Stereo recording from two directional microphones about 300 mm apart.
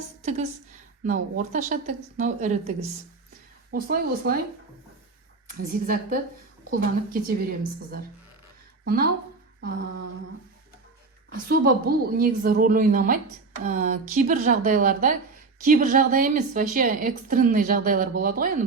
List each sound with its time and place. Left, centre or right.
1.0 s a woman's voice: right
5.5 s a woman's voice: right
11.4 s a woman's voice: right